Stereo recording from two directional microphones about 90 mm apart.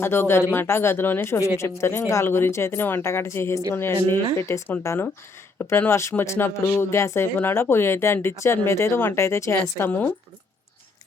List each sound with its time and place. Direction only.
0.0 s speech: 25° left (ahead or behind)